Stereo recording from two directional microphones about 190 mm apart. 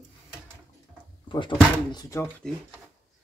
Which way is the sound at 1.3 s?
25° left (ahead or behind).